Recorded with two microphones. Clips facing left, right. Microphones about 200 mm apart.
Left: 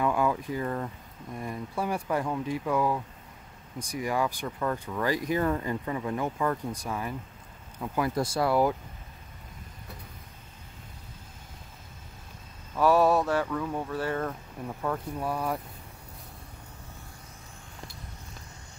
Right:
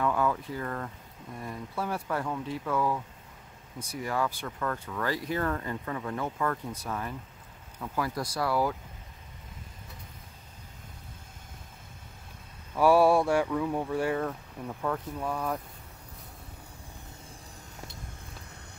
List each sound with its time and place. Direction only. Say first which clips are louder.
0.0 s a sound: left 1 dB; 15° left (ahead or behind)
1.4 s speech: left 3 dB; 15° left (ahead or behind)
12.7 s speech: right 1 dB; 10° right (ahead or behind)
14.2 s speech: even; 5° left (ahead or behind)